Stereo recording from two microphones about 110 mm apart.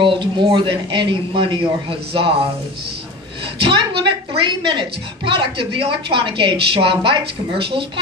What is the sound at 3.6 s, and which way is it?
A woman's voice, 50° right (ahead or behind).